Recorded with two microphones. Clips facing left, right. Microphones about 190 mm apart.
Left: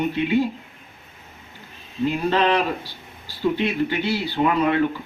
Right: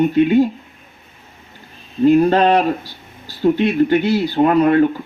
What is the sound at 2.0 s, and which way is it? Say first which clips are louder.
Speech: right 9 dB; 45° right (ahead or behind).